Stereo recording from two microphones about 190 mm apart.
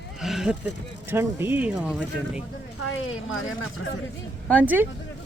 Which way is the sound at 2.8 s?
90° left.